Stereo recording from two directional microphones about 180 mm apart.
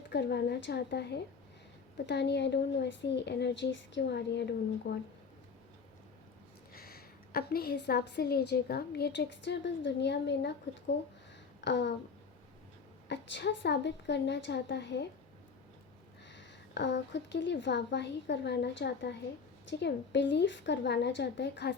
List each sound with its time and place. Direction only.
0.1 s a woman's voice: 70° left (ahead or behind)
6.7 s a woman's voice: 60° left (ahead or behind); by 10.5 s 75° left (ahead or behind)
11.6 s a woman's voice: 75° left (ahead or behind)
13.1 s a woman's voice: 75° left (ahead or behind)
16.3 s a woman's voice: 80° left